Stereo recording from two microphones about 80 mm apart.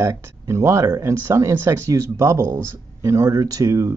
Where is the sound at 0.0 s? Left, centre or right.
Right.